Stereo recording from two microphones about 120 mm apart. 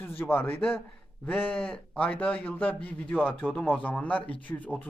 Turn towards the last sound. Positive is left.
turn(degrees=15)  # may be behind; listen again after turning